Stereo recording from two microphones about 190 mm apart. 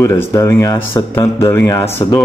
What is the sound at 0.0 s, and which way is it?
A man's voice, 15° left (ahead or behind).